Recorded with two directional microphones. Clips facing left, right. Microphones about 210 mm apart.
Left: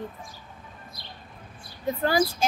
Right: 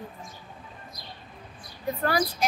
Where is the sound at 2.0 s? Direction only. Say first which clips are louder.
Left 3 dB; 25° left (ahead or behind).